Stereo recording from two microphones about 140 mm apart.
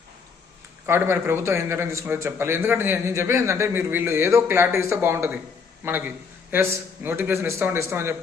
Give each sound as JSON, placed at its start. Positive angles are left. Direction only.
{"t": 0.9, "sound": "a man's voice", "side_deg": -15}